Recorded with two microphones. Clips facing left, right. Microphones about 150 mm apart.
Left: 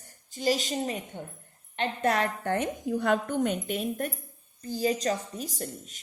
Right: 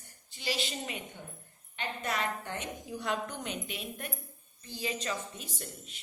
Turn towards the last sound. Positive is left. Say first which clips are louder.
# left 7 dB
turn(degrees=40)  # may be behind; listen again after turning